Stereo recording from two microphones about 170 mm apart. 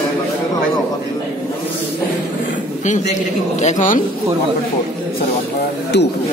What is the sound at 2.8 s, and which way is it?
A man's voice, 45° left (ahead or behind).